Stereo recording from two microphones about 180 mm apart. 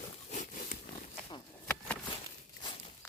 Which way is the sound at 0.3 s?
45° left (ahead or behind).